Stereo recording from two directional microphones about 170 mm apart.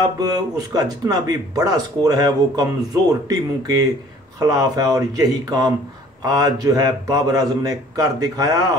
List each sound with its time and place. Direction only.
0.0 s speech: 25° right (ahead or behind)